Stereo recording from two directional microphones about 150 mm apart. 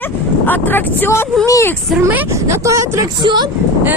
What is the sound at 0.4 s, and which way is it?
Speech, 10° left (ahead or behind).